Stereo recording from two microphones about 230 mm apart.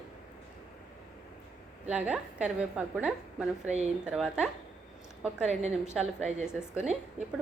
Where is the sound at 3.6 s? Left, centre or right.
Right.